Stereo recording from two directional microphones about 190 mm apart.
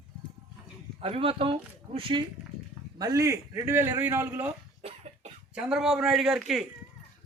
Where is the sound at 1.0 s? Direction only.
30° right (ahead or behind); by 4.5 s 10° right (ahead or behind).